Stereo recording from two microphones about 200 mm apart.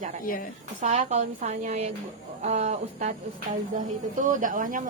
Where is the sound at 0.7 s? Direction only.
40° right (ahead or behind).